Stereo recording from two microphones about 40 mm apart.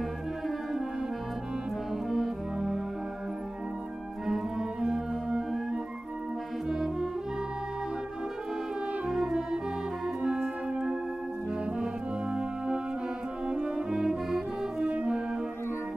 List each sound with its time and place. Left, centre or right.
2.0 s brass instrument: centre
4.8 s organ: centre
6.7 s music: centre
9.0 s music: centre
10.0 s organ: centre
10.7 s music: right
11.7 s brass instrument: right
13.5 s music: right
13.8 s brass instrument: centre